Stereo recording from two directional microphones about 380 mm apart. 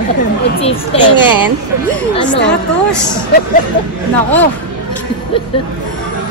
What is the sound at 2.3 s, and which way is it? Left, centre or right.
Speech, left.